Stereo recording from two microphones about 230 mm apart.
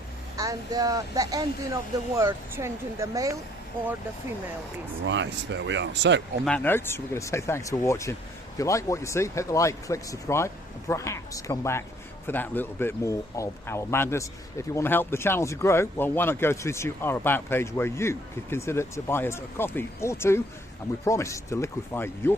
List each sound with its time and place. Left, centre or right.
0.3 s speech: centre
5.0 s speech: right
6.4 s speech: centre